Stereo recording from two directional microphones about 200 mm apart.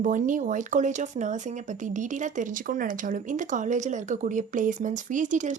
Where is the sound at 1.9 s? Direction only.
40° right (ahead or behind).